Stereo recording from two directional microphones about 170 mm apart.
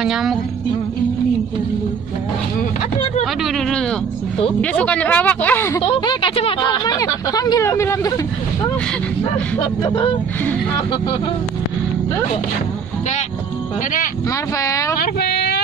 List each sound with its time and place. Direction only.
0.0 s speech: centre (ahead or behind)
4.6 s speech: 10° left (ahead or behind)
5.8 s speech: 25° left (ahead or behind)
9.6 s speech: 30° left (ahead or behind)
14.6 s speech: 20° left (ahead or behind)
15.0 s a sound: 70° left (ahead or behind)